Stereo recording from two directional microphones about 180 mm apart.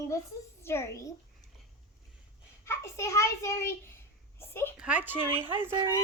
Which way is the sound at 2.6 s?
15° left (ahead or behind).